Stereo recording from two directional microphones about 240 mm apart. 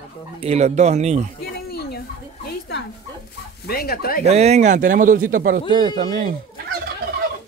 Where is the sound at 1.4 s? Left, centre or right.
Left.